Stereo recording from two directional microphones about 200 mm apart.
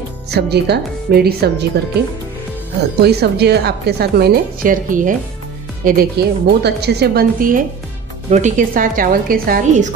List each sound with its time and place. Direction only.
0.3 s speech: 55° right (ahead or behind)
3.0 s a woman's voice: 55° right (ahead or behind)